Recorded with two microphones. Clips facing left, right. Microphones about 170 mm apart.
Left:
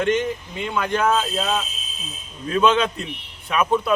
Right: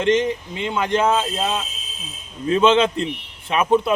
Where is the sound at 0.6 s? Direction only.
20° right (ahead or behind).